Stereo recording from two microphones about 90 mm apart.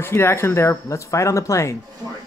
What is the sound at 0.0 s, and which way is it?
Speech, 25° left (ahead or behind).